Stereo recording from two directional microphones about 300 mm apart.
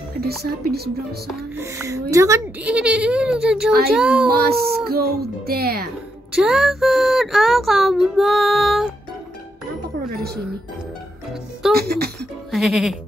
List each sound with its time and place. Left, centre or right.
0.2 s speech: right
1.2 s speech: centre
4.3 s speech: right
6.3 s speech: centre
10.0 s speech: right
11.7 s speech: right
12.4 s music: centre